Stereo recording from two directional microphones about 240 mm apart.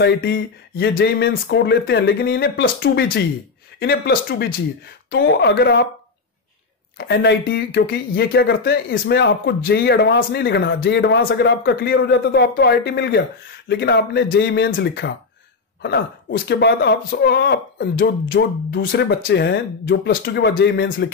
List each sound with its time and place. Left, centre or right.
0.0 s speech: left
5.1 s speech: left
7.0 s speech: left